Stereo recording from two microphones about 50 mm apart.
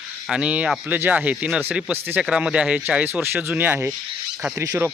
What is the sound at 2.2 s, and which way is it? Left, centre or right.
Speech, right.